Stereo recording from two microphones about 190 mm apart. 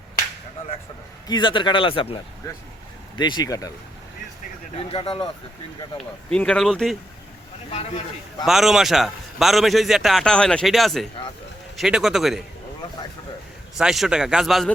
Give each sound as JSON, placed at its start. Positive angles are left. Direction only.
{"t": 1.3, "sound": "speech", "side_deg": 25}
{"t": 3.2, "sound": "speech", "side_deg": 20}
{"t": 4.8, "sound": "speech", "side_deg": 30}
{"t": 6.3, "sound": "a man's voice", "side_deg": 5}
{"t": 7.7, "sound": "a man's voice", "side_deg": 30}
{"t": 8.4, "sound": "a man's voice", "side_deg": 0}
{"t": 13.7, "sound": "a man's voice", "side_deg": 0}